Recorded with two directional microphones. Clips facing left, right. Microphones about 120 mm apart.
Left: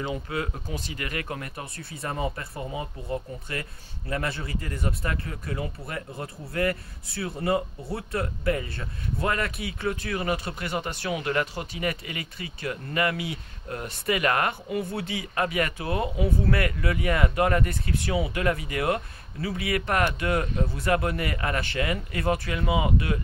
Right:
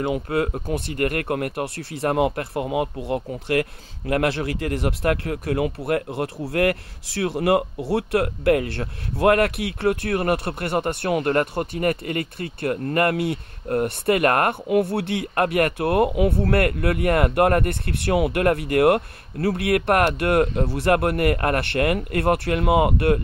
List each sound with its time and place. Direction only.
0.0 s speech: 55° right (ahead or behind)